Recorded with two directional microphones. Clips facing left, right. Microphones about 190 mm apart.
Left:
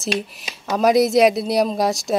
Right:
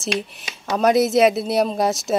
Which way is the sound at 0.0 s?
Centre (ahead or behind).